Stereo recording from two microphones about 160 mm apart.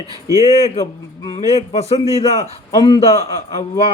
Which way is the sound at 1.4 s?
40° left (ahead or behind).